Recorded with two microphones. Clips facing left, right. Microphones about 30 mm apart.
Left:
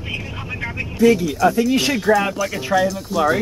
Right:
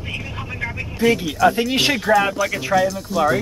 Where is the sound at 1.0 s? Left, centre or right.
Centre.